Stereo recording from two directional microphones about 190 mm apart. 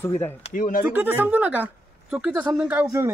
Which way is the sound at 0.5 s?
45° left (ahead or behind).